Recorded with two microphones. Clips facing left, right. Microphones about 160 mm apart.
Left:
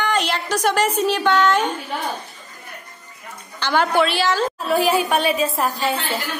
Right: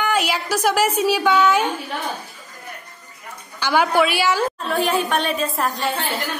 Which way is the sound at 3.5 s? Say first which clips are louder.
Right 1 dB; 10° right (ahead or behind).